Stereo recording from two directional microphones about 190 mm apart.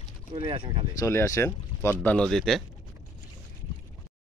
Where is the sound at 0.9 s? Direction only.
15° left (ahead or behind).